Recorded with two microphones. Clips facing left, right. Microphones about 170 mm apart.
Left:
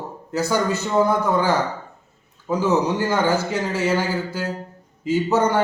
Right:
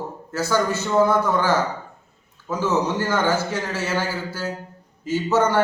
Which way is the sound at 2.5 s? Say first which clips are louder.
Left 3 dB; 15° left (ahead or behind).